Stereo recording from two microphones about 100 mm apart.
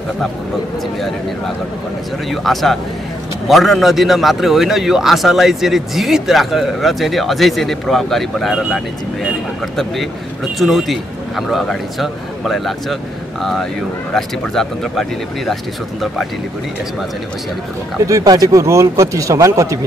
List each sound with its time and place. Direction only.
2.4 s a man's voice: 5° left (ahead or behind)
9.8 s a man's voice: centre (ahead or behind)
18.0 s speech: 35° right (ahead or behind)